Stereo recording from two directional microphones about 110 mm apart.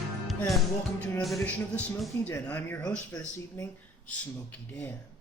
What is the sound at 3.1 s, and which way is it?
Speech, 30° left (ahead or behind).